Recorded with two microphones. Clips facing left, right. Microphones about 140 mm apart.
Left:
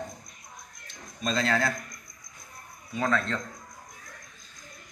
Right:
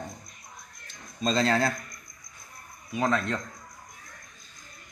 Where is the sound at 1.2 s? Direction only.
25° right (ahead or behind).